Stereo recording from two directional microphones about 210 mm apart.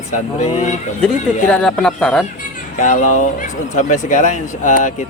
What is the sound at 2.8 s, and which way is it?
Speech, 35° left (ahead or behind).